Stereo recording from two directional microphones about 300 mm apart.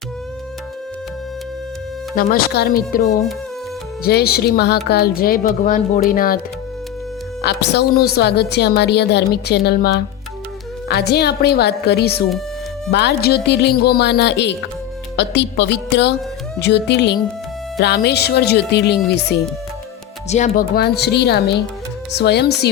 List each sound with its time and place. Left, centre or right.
2.1 s a woman's voice: left
7.4 s a woman's voice: left